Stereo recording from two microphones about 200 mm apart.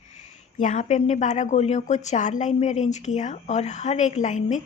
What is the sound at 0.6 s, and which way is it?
A woman's voice, 35° left (ahead or behind).